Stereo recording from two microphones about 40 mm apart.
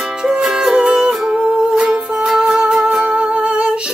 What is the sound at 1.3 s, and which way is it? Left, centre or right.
Music, centre.